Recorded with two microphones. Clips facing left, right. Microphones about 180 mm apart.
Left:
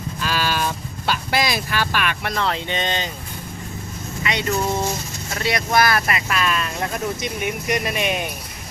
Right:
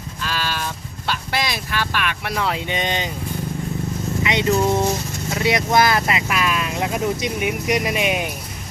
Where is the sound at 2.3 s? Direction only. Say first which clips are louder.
Right 3 dB; 10° right (ahead or behind).